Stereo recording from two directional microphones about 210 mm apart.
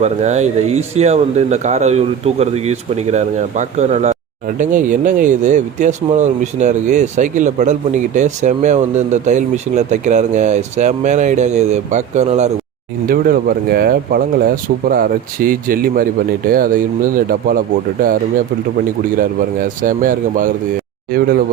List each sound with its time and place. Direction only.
0.0 s speech: 35° right (ahead or behind)
13.1 s speech: 45° right (ahead or behind)